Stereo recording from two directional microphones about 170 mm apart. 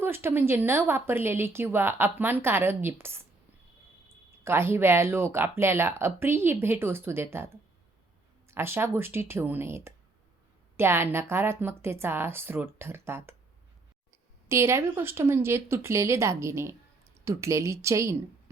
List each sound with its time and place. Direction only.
0.0 s speech: 15° right (ahead or behind)
4.4 s speech: 15° right (ahead or behind)
14.4 s speech: 15° right (ahead or behind)